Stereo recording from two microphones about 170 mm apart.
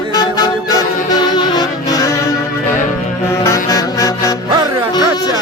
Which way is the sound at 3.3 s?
20° left (ahead or behind).